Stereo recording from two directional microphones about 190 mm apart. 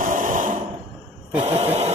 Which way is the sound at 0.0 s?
45° right (ahead or behind).